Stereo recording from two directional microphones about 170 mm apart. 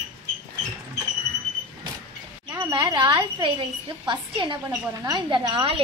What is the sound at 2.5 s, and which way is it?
Speech, 25° right (ahead or behind).